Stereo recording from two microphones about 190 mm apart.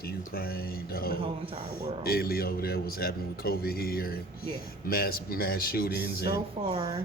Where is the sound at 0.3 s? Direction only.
50° left (ahead or behind).